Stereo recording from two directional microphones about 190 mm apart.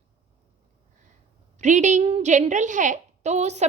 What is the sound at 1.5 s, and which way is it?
A woman's voice, 40° right (ahead or behind).